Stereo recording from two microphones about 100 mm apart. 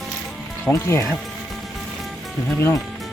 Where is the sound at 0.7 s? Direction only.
25° left (ahead or behind).